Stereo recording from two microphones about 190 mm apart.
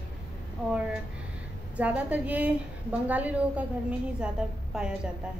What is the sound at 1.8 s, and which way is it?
A woman's voice, 5° right (ahead or behind).